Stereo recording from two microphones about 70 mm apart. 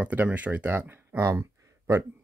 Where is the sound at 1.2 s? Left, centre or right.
Right.